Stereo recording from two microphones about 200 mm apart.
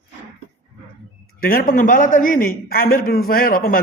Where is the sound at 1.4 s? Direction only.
45° left (ahead or behind).